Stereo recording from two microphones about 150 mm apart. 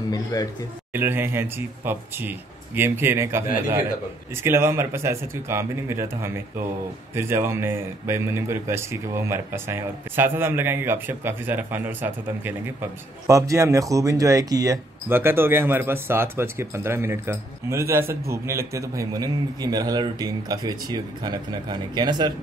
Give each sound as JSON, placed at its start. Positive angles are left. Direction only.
{"t": 0.1, "sound": "a man's voice", "side_deg": 25}
{"t": 0.9, "sound": "speech", "side_deg": -15}
{"t": 15.0, "sound": "speech", "side_deg": -15}